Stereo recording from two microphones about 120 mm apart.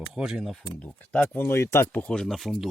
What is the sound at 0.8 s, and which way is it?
Speech, 10° left (ahead or behind).